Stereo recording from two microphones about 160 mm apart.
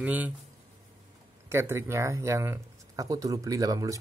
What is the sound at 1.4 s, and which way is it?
Speech, 15° right (ahead or behind).